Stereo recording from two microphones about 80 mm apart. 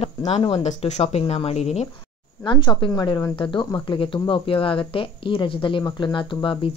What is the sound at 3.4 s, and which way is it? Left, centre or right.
Speech, left.